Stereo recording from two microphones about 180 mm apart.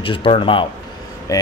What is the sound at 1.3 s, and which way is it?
Speech, 15° left (ahead or behind).